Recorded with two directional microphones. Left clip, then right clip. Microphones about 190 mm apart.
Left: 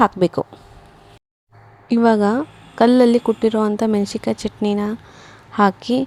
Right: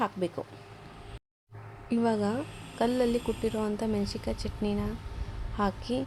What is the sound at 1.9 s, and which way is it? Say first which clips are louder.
Speech: left 13 dB; 40° left (ahead or behind).